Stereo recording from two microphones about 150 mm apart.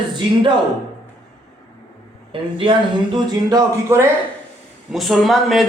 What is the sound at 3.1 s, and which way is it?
Speech, 25° right (ahead or behind).